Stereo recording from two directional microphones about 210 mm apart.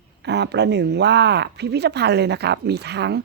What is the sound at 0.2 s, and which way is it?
Speech, 55° right (ahead or behind).